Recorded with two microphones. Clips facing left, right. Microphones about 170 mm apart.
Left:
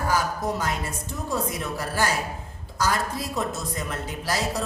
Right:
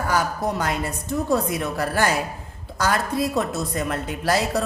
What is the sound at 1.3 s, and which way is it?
A woman's voice, 60° right (ahead or behind).